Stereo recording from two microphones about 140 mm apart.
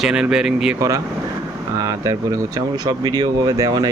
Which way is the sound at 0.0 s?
5° right (ahead or behind).